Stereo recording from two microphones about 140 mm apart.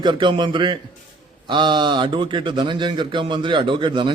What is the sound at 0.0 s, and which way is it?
A man's voice, 35° right (ahead or behind).